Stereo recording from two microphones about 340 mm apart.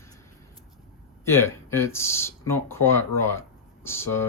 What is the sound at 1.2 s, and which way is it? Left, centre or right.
Speech, centre.